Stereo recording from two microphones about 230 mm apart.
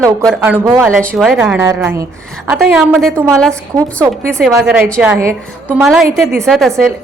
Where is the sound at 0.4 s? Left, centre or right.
Centre.